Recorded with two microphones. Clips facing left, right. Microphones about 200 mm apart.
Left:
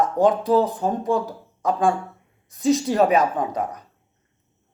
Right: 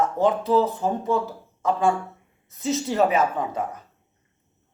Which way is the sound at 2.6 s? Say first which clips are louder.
Left 4 dB; 15° left (ahead or behind).